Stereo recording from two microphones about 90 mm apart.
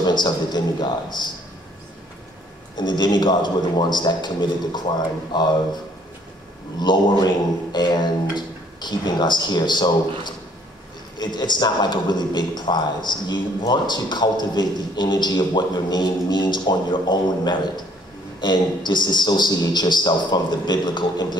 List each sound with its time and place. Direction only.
0.0 s speech: 50° left (ahead or behind)
2.8 s speech: 55° left (ahead or behind)
6.8 s speech: 55° left (ahead or behind)